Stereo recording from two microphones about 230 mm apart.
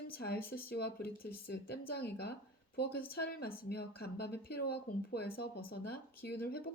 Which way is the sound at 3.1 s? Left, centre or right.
Left.